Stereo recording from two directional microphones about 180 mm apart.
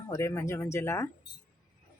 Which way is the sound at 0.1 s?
15° left (ahead or behind).